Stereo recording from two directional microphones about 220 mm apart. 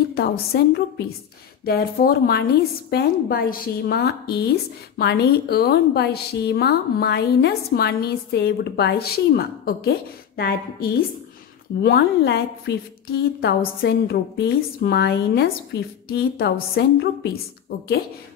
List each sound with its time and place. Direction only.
0.1 s a woman's voice: 45° left (ahead or behind)